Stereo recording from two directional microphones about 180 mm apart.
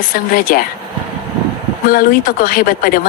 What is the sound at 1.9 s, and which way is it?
Speech, 50° left (ahead or behind).